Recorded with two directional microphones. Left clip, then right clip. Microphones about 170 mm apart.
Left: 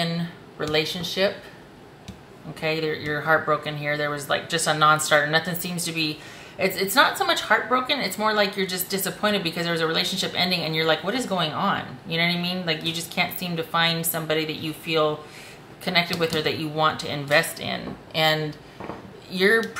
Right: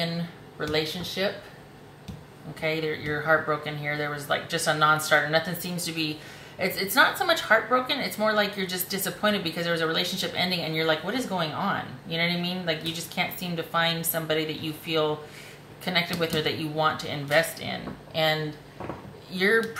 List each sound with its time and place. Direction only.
0.6 s a woman's voice: 25° left (ahead or behind)
2.6 s a woman's voice: 25° left (ahead or behind)